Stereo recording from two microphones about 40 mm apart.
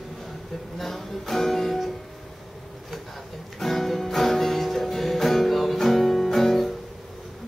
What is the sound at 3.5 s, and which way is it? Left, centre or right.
Music, centre.